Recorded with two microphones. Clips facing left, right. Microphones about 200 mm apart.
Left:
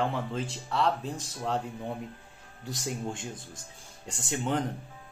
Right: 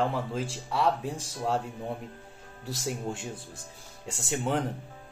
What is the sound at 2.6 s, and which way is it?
Speech, 5° right (ahead or behind).